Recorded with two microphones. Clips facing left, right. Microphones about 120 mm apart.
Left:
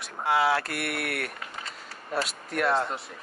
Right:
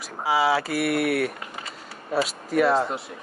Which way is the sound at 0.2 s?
Centre (ahead or behind).